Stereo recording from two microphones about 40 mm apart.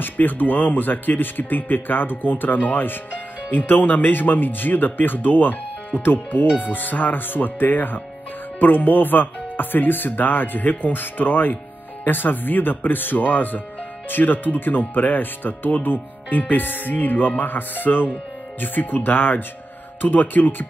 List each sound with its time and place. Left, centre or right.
0.0 s speech: left